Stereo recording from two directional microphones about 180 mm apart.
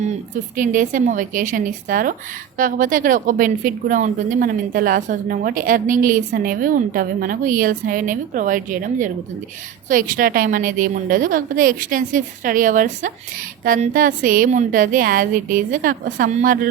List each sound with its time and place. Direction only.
0.5 s a woman's voice: 45° right (ahead or behind)